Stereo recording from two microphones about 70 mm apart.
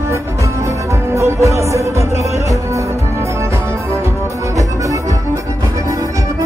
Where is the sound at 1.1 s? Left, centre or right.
Right.